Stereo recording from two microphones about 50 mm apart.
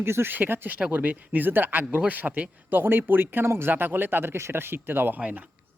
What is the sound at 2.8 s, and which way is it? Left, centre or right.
Speech, right.